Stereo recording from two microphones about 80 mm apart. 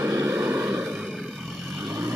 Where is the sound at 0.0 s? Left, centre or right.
Right.